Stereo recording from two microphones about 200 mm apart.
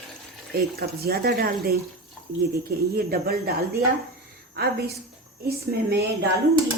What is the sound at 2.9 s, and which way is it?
A woman's voice, 50° right (ahead or behind).